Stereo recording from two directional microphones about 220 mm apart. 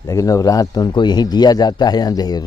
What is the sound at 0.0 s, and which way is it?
A man's voice, 15° left (ahead or behind).